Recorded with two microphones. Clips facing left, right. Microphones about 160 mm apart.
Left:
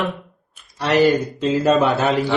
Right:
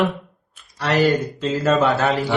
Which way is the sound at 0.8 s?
20° left (ahead or behind).